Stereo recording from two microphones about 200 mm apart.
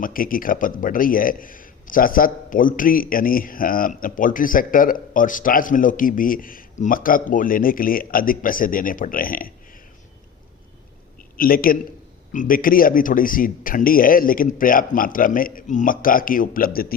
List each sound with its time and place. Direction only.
0.0 s a man's voice: 45° left (ahead or behind)
11.3 s a man's voice: 45° left (ahead or behind)